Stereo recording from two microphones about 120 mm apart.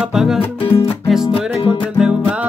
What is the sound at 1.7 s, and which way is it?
Music, 5° right (ahead or behind).